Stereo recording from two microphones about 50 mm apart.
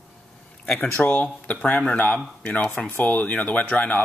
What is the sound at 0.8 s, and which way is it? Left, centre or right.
Speech, left.